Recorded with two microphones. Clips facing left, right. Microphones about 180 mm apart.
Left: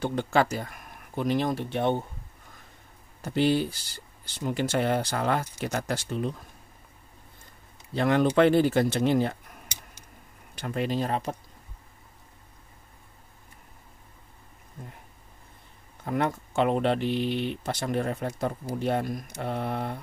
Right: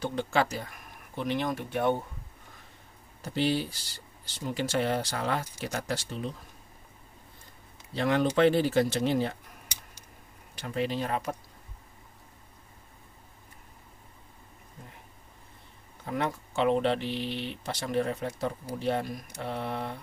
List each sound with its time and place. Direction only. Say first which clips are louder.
0.0 s speech: left 3 dB; 50° left (ahead or behind); by 2.0 s 25° left (ahead or behind)
3.2 s speech: left 4 dB; 55° left (ahead or behind)
7.9 s speech: left 3 dB; 50° left (ahead or behind)
10.6 s speech: left 2 dB; 50° left (ahead or behind); by 11.3 s 30° left (ahead or behind)
16.1 s speech: left 4 dB; 50° left (ahead or behind)